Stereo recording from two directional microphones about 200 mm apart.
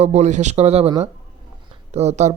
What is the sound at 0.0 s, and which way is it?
Speech, 35° right (ahead or behind).